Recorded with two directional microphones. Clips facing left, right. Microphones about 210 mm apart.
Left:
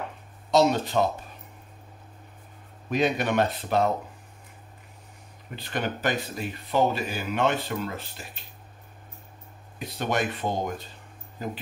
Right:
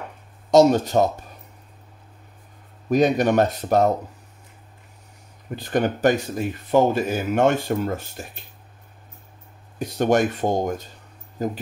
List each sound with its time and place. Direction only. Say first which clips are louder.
0.5 s speech: right 7 dB; 45° right (ahead or behind)
2.9 s speech: right 7 dB; 40° right (ahead or behind)
5.6 s speech: right 9 dB; 45° right (ahead or behind)
9.8 s speech: right 8 dB; 45° right (ahead or behind)